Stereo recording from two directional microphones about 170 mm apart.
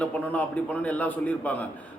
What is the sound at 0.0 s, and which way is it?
A man's voice, 5° left (ahead or behind).